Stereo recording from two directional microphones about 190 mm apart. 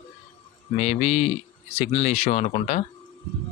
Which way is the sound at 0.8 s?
35° left (ahead or behind).